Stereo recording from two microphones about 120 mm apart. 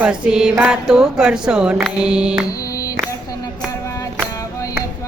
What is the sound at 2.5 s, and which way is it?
Music, 30° left (ahead or behind).